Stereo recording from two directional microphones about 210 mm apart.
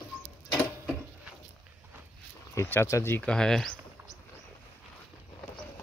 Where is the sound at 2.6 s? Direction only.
10° left (ahead or behind).